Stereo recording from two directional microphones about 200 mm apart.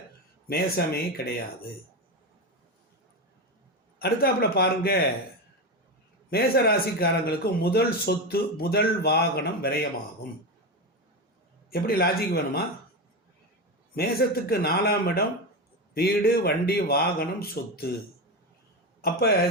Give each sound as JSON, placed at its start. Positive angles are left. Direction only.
{"t": 0.4, "sound": "speech", "side_deg": 50}
{"t": 4.0, "sound": "speech", "side_deg": 50}
{"t": 6.3, "sound": "speech", "side_deg": 50}
{"t": 11.7, "sound": "speech", "side_deg": 50}
{"t": 13.9, "sound": "speech", "side_deg": 50}
{"t": 19.0, "sound": "speech", "side_deg": 50}